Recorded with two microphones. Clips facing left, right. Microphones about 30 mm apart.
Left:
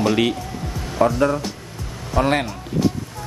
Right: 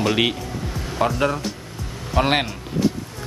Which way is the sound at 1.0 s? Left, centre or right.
Right.